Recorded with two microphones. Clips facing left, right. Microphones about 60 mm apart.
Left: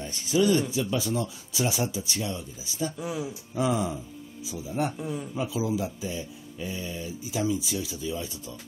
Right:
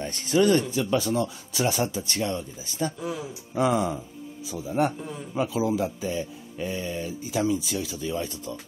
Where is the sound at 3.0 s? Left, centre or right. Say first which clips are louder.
Even; centre.